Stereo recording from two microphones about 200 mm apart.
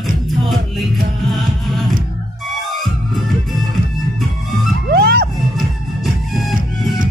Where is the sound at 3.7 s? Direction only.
Centre (ahead or behind).